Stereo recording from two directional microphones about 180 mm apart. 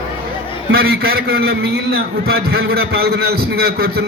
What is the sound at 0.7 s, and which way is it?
A man's voice, 60° right (ahead or behind).